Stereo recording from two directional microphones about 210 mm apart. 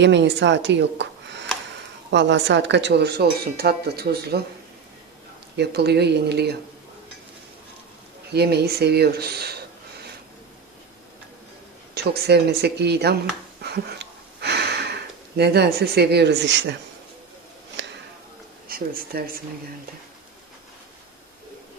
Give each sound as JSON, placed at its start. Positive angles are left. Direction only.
{"t": 0.0, "sound": "speech", "side_deg": -55}
{"t": 5.5, "sound": "speech", "side_deg": -50}
{"t": 8.3, "sound": "speech", "side_deg": -50}
{"t": 12.1, "sound": "speech", "side_deg": -50}
{"t": 13.6, "sound": "a sound", "side_deg": -50}
{"t": 15.4, "sound": "speech", "side_deg": -50}
{"t": 18.7, "sound": "speech", "side_deg": -45}